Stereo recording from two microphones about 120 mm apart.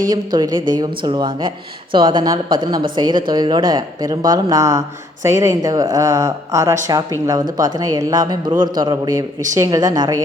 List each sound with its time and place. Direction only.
0.1 s a woman's voice: 35° right (ahead or behind)